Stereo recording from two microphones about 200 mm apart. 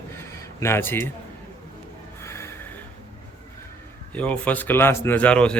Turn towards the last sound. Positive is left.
turn(degrees=5)  # may be behind; listen again after turning